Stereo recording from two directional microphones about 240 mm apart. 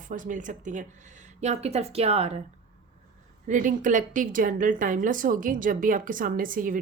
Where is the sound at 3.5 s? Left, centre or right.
Right.